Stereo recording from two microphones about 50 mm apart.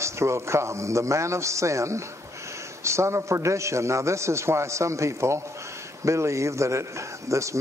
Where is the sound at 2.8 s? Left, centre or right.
Right.